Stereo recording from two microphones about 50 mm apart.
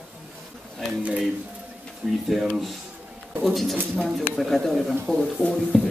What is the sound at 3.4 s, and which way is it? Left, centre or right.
A woman's voice, centre.